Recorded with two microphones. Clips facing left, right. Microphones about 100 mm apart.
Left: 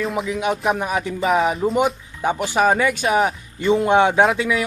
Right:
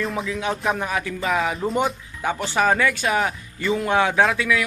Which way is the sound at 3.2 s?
30° left (ahead or behind).